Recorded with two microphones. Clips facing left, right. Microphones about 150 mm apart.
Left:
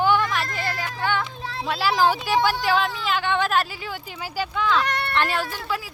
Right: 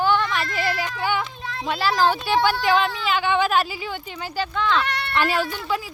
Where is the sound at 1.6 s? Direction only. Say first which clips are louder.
Even; 10° left (ahead or behind).